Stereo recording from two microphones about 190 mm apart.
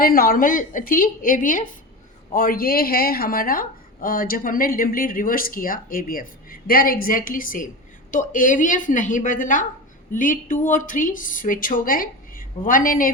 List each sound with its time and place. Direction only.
0.0 s a woman's voice: 50° left (ahead or behind)